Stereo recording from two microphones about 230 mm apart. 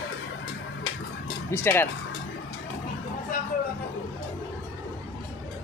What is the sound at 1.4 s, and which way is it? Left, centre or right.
Speech, centre.